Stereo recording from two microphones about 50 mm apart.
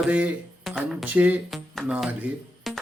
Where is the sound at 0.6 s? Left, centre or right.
Centre.